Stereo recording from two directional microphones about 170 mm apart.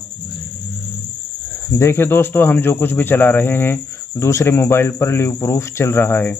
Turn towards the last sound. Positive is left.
turn(degrees=15)  # may be behind; listen again after turning